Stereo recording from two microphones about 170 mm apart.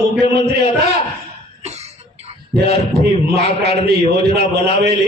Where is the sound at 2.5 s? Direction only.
70° right (ahead or behind).